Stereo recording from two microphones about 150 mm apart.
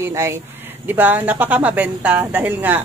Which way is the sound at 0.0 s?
15° right (ahead or behind).